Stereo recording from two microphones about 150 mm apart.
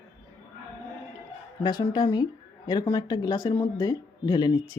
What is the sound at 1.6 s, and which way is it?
Speech, 30° left (ahead or behind).